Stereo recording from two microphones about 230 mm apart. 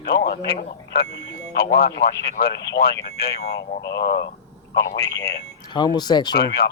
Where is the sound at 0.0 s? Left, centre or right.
Left.